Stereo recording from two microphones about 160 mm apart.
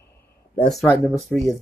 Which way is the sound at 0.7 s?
Centre (ahead or behind).